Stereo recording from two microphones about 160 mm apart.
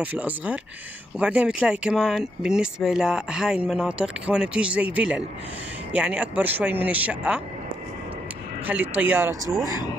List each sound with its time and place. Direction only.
0.0 s speech: 10° right (ahead or behind)
8.6 s speech: 10° right (ahead or behind)